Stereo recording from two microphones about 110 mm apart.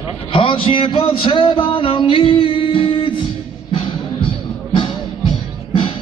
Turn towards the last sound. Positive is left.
turn(degrees=55)  # may be behind; listen again after turning